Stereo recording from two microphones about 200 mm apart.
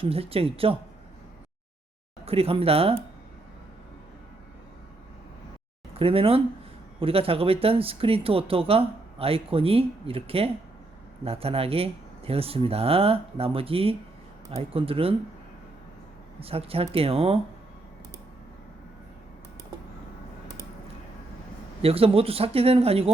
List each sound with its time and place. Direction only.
0.0 s speech: 30° right (ahead or behind)
2.2 s speech: 30° right (ahead or behind)
5.9 s speech: 30° right (ahead or behind)
16.4 s speech: 30° right (ahead or behind)
21.8 s speech: 30° right (ahead or behind)